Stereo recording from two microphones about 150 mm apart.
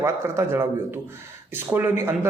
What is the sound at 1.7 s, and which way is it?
Speech, 15° right (ahead or behind).